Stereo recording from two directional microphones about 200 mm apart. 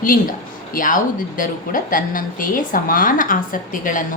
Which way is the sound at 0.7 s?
40° left (ahead or behind).